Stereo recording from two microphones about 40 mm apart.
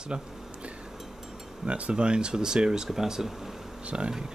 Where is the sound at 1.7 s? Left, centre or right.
Right; by 3.3 s centre.